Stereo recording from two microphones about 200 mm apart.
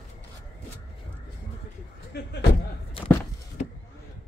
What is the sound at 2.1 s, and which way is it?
Speech, 60° left (ahead or behind).